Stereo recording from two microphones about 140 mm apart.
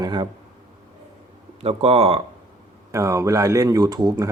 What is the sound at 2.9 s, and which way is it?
Speech, 20° right (ahead or behind).